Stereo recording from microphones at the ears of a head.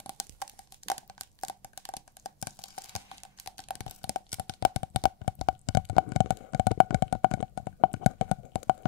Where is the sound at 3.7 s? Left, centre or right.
Left.